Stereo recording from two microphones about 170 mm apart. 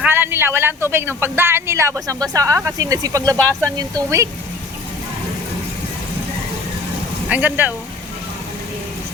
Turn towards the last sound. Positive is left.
turn(degrees=-10)  # may be behind; listen again after turning